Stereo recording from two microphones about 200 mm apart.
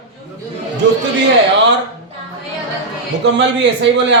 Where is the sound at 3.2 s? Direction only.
65° right (ahead or behind).